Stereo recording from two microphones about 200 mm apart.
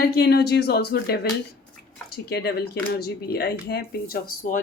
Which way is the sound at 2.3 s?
55° left (ahead or behind).